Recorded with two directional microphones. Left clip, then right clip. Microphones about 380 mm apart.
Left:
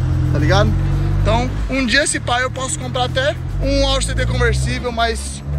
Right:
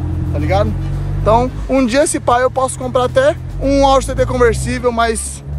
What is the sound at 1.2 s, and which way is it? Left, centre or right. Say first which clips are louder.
Speech: right 7 dB; centre.